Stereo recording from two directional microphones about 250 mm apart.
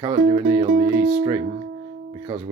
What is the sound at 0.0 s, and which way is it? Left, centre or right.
Music, centre.